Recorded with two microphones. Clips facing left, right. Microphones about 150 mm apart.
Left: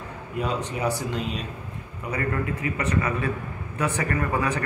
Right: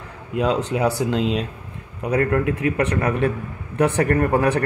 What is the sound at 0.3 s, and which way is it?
Speech, 90° right.